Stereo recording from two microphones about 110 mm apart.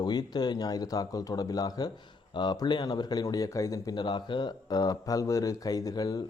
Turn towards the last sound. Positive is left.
turn(degrees=35)  # may be behind; listen again after turning